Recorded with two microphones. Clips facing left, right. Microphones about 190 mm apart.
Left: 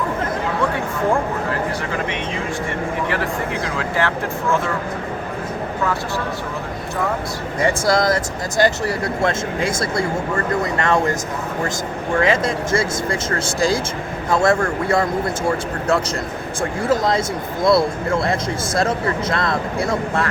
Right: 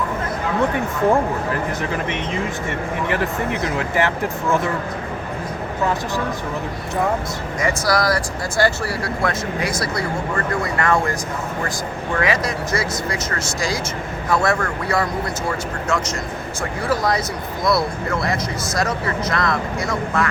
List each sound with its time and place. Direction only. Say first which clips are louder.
3.8 s speech: even; 20° right (ahead or behind)
7.6 s speech: left 3 dB; 25° left (ahead or behind)
12.2 s speech: left 3 dB; 25° left (ahead or behind)